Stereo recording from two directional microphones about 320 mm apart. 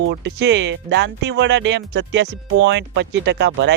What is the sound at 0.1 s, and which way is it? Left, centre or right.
Speech, right.